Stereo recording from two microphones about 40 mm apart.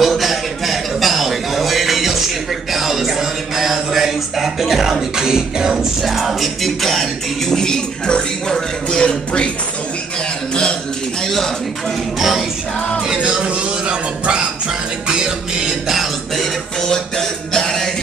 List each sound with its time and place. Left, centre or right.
0.0 s a sound: centre
6.0 s music: centre
9.0 s a sound: left
12.2 s music: centre
13.2 s music: right; by 16.1 s centre
16.3 s music: centre